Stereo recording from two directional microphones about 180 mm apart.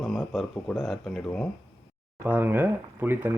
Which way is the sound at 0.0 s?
Centre (ahead or behind).